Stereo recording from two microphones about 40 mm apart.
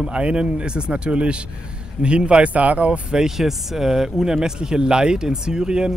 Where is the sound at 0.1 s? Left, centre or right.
Right.